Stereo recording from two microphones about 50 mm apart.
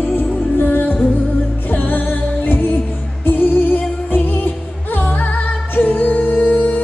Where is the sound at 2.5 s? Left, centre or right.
Left.